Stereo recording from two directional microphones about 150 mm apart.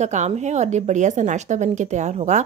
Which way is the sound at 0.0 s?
50° right (ahead or behind).